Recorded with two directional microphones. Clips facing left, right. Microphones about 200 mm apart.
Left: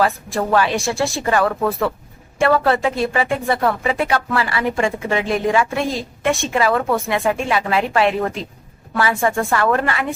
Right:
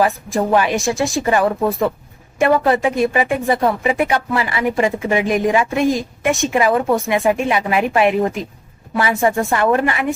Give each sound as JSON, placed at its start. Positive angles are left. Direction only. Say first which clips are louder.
{"t": 0.3, "sound": "a woman's voice", "louder": "right 2 dB", "side_deg": -15}